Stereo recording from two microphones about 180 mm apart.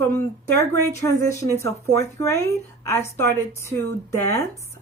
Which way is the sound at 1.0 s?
15° left (ahead or behind).